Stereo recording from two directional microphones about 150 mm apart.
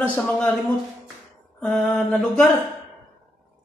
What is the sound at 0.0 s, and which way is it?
Speech, 10° left (ahead or behind).